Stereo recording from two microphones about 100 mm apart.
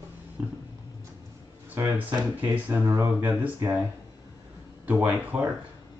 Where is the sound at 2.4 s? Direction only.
25° right (ahead or behind).